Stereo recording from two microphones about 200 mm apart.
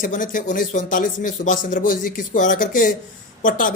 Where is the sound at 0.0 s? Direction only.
40° left (ahead or behind).